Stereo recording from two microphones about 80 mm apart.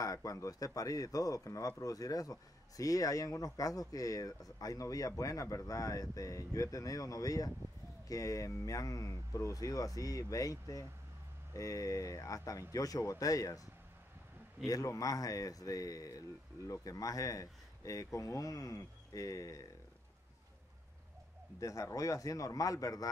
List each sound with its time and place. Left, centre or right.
0.0 s speech: left
14.7 s speech: left
21.5 s speech: left